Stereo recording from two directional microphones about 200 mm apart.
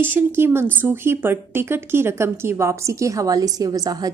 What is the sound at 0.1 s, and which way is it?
A woman's voice, 10° right (ahead or behind).